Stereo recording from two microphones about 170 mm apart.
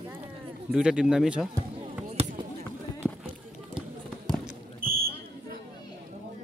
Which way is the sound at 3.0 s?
15° right (ahead or behind).